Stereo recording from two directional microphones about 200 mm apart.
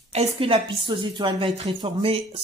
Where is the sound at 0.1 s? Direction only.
30° right (ahead or behind).